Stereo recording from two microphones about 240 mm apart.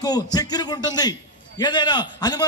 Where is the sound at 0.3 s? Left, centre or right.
Centre.